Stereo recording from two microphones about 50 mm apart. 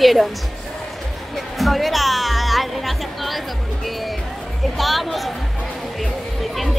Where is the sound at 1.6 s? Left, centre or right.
Centre.